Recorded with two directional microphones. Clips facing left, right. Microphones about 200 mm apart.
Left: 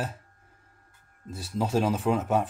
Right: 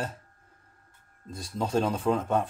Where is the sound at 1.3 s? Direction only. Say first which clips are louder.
Left 1 dB; 5° left (ahead or behind).